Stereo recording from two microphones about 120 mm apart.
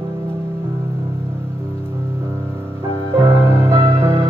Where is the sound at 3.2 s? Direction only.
20° right (ahead or behind).